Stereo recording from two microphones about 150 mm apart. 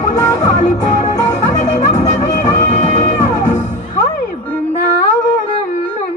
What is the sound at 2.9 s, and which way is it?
Music, 55° left (ahead or behind).